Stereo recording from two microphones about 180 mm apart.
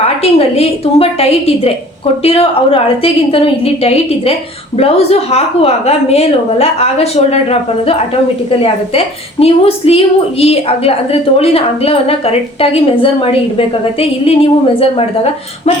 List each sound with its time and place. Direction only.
0.2 s a woman's voice: 35° left (ahead or behind)
9.4 s a woman's voice: 35° left (ahead or behind)